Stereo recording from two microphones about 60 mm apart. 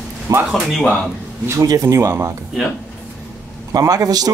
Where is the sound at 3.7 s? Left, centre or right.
Right.